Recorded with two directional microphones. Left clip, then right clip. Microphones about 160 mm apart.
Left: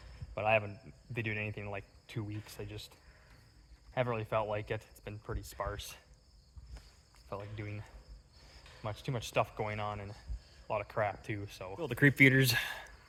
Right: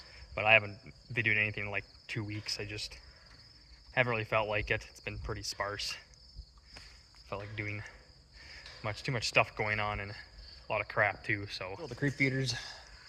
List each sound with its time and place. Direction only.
0.3 s speech: 15° left (ahead or behind)
7.3 s speech: 10° left (ahead or behind)
11.8 s speech: 90° left